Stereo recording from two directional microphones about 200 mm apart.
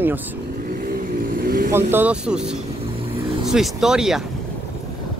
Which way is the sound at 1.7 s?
10° right (ahead or behind).